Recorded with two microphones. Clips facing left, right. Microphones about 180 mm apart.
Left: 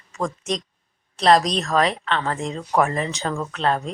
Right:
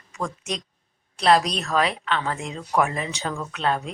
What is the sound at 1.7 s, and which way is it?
Speech, 40° left (ahead or behind).